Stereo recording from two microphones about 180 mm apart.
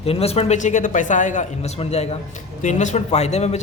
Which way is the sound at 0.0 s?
35° left (ahead or behind).